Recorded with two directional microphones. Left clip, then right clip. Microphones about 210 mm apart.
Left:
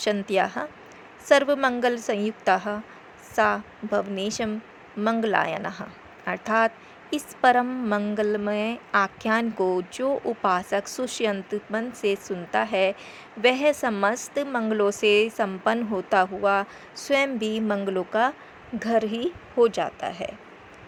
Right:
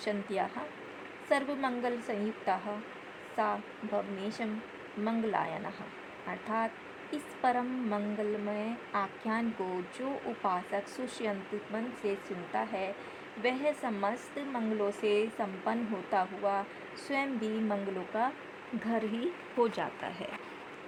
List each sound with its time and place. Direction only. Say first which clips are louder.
0.0 s a woman's voice: left 10 dB; 30° left (ahead or behind); by 20.2 s 10° left (ahead or behind)